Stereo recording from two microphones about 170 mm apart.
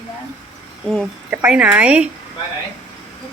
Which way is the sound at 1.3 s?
5° right (ahead or behind).